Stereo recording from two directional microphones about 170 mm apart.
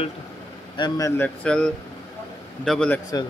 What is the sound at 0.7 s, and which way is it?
Speech, 25° left (ahead or behind).